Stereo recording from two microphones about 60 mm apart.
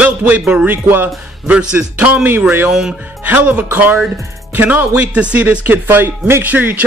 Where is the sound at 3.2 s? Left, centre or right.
Right.